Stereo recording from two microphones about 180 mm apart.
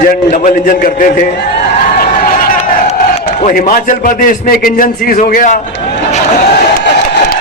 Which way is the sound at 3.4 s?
50° left (ahead or behind).